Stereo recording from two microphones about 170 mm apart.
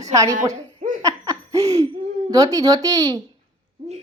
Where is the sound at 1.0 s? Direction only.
20° right (ahead or behind).